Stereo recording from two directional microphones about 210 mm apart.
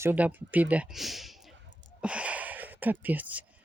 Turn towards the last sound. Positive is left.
turn(degrees=-10)  # may be behind; listen again after turning